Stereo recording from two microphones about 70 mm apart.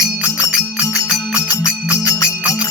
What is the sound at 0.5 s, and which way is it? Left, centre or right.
Music, centre.